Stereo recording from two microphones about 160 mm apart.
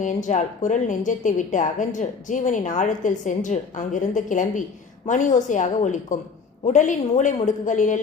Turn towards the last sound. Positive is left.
turn(degrees=50)  # may be behind; listen again after turning